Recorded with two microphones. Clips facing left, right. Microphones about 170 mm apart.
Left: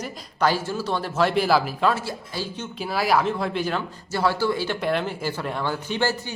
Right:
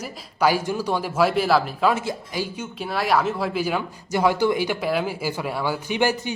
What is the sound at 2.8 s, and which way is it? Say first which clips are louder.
Speech: even; centre (ahead or behind).